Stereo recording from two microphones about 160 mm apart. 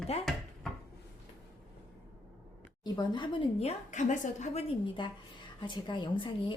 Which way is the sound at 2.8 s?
30° left (ahead or behind).